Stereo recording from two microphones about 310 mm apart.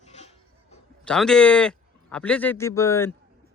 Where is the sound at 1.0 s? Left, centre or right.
Centre.